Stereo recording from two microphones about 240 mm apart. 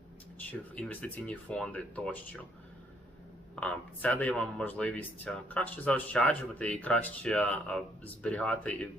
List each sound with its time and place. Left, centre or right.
0.8 s speech: centre
3.5 s speech: centre